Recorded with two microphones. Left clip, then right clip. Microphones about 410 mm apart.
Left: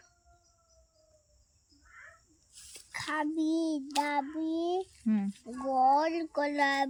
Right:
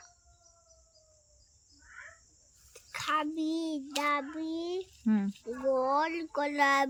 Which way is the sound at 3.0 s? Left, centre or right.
Centre.